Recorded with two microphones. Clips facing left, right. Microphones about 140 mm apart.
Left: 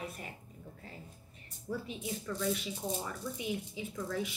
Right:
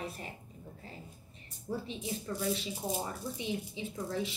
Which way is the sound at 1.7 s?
25° right (ahead or behind).